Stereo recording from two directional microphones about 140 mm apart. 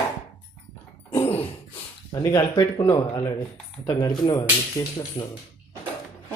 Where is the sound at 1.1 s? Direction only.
20° left (ahead or behind).